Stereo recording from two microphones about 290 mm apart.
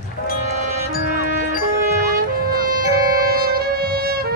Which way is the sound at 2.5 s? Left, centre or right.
Right.